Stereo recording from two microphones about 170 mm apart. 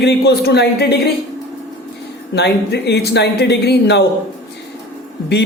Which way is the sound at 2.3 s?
75° left (ahead or behind).